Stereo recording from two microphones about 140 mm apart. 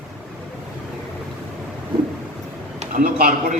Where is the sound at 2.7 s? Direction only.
85° right.